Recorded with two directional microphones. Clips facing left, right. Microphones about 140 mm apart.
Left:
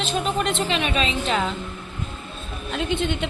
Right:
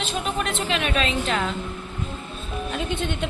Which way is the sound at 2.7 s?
Centre (ahead or behind).